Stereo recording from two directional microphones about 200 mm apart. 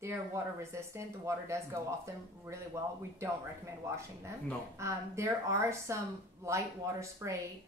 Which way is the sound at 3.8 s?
15° right (ahead or behind).